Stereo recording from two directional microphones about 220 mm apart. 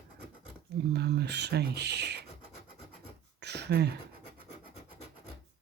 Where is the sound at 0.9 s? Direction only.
50° right (ahead or behind).